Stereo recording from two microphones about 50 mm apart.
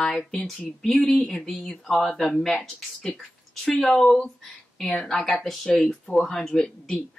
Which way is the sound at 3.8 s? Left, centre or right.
Centre.